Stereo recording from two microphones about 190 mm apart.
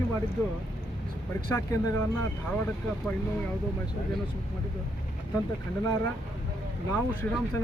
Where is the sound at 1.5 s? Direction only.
15° left (ahead or behind).